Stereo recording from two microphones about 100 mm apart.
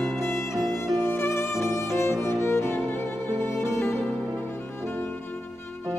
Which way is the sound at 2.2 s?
25° left (ahead or behind).